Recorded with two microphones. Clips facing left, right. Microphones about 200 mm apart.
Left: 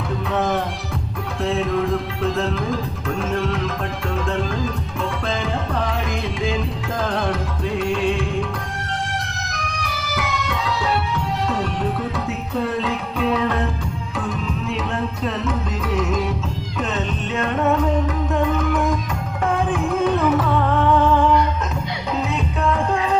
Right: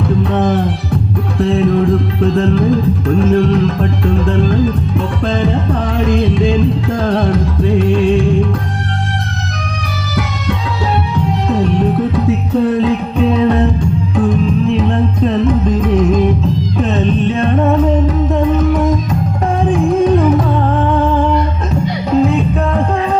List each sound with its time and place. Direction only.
2.2 s music: 35° right (ahead or behind)
6.1 s music: 30° right (ahead or behind)
12.8 s music: 30° right (ahead or behind)
15.4 s music: 40° right (ahead or behind)
19.7 s music: 30° right (ahead or behind)